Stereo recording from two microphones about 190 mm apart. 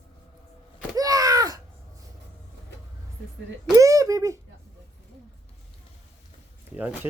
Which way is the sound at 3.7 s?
15° right (ahead or behind).